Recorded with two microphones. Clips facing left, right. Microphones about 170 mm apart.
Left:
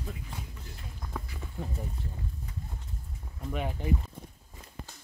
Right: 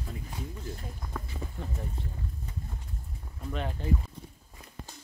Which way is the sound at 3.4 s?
10° left (ahead or behind).